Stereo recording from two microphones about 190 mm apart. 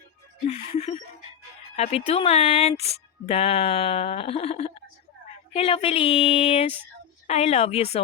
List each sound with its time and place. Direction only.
0.4 s speech: 35° left (ahead or behind)